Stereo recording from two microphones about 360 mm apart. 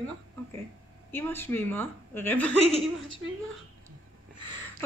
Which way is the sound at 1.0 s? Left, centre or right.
Centre.